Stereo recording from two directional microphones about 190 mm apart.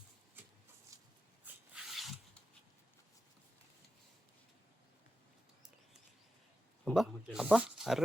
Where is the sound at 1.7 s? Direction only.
Centre (ahead or behind).